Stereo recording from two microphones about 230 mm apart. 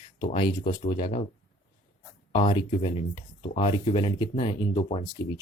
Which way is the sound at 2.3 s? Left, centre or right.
Left.